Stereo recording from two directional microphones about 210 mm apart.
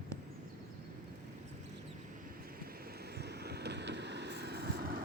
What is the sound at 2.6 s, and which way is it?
Vehicle, 45° right (ahead or behind).